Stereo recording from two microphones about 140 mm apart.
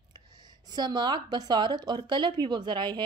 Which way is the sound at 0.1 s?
30° right (ahead or behind).